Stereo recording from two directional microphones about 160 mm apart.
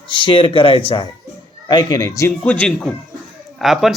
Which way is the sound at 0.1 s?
30° left (ahead or behind).